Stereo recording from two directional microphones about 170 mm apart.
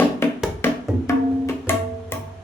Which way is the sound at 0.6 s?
15° left (ahead or behind).